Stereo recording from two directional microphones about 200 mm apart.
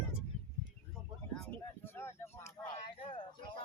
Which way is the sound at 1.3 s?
5° left (ahead or behind).